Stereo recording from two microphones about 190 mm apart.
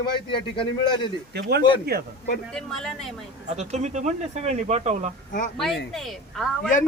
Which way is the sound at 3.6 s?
35° right (ahead or behind).